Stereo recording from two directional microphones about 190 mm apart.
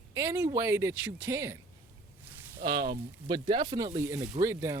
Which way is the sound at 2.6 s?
25° right (ahead or behind).